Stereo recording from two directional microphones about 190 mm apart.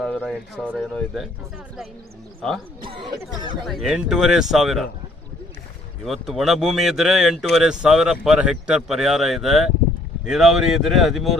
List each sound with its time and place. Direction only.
0.0 s speech: 5° left (ahead or behind)
2.8 s speech: 25° right (ahead or behind)
3.7 s speech: centre (ahead or behind)
6.1 s speech: centre (ahead or behind)